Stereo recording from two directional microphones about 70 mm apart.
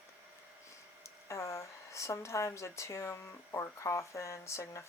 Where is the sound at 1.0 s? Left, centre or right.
Left.